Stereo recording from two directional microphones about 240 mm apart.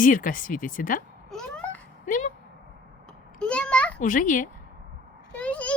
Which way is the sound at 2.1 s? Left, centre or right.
Left.